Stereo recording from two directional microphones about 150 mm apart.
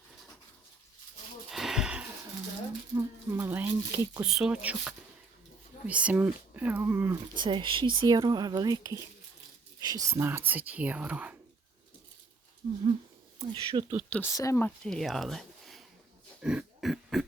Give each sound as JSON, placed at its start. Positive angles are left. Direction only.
{"t": 1.5, "sound": "a sound", "side_deg": 0}
{"t": 4.2, "sound": "speech", "side_deg": -5}
{"t": 7.3, "sound": "speech", "side_deg": -35}
{"t": 12.6, "sound": "speech", "side_deg": -35}
{"t": 14.1, "sound": "speech", "side_deg": 15}
{"t": 14.8, "sound": "speech", "side_deg": 0}
{"t": 16.4, "sound": "a sound", "side_deg": -5}